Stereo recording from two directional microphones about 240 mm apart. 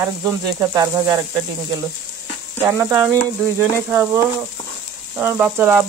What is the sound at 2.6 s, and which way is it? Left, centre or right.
Speech, centre.